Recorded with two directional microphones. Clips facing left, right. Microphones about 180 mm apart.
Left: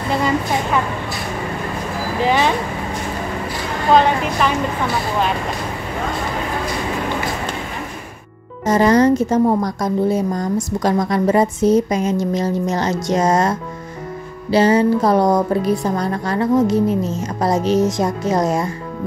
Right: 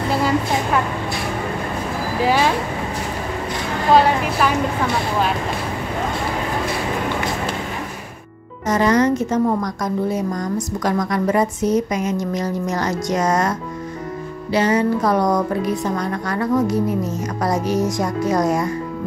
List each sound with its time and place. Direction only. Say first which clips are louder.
2.2 s a woman's voice: left 1 dB; centre (ahead or behind)
3.9 s a woman's voice: left 1 dB; 5° right (ahead or behind)
8.6 s a woman's voice: left 3 dB; 30° left (ahead or behind)